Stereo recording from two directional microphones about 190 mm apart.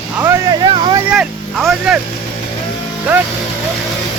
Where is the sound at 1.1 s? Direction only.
5° right (ahead or behind).